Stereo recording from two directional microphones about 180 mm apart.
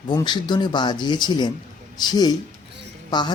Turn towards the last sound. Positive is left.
turn(degrees=25)  # may be behind; listen again after turning